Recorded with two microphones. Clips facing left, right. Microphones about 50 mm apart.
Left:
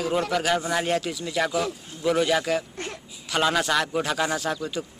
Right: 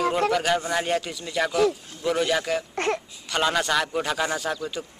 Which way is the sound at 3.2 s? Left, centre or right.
Centre.